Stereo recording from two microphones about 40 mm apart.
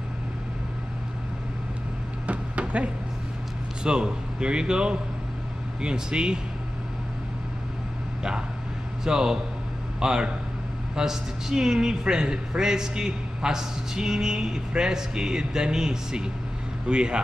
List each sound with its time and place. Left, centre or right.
2.2 s a sound: right
3.8 s a man's voice: right
9.0 s a man's voice: centre